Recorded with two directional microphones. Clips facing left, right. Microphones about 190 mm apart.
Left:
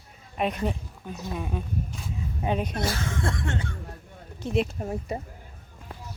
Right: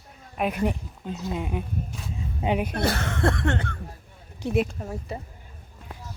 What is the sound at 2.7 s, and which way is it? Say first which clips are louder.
Speech: right 3 dB; 60° right (ahead or behind).